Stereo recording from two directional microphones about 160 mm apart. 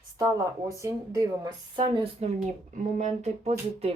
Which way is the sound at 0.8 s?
25° right (ahead or behind).